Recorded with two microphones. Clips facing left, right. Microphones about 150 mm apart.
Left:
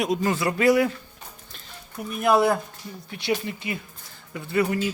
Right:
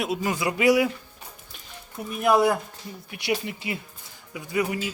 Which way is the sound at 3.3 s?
20° right (ahead or behind).